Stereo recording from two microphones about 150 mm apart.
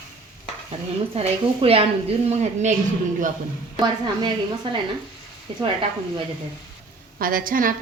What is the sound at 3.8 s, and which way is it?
Speech, 30° right (ahead or behind).